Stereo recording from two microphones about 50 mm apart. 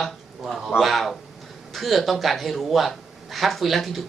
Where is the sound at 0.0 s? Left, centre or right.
Centre.